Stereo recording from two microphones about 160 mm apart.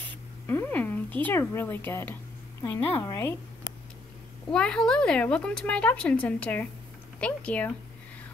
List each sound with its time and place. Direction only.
0.5 s a woman's voice: 15° left (ahead or behind)
4.5 s a woman's voice: 5° left (ahead or behind)